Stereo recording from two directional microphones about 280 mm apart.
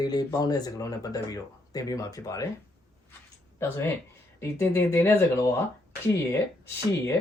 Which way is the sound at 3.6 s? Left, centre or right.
Centre.